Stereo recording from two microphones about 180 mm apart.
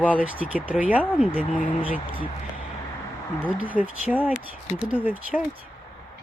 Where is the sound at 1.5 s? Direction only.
50° left (ahead or behind).